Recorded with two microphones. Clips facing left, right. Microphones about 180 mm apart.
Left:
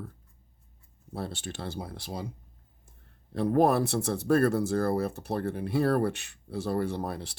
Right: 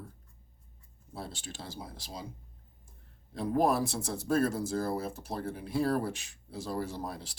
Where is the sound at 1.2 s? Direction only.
65° left (ahead or behind).